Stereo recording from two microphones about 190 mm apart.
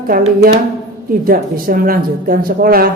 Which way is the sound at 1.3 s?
50° right (ahead or behind).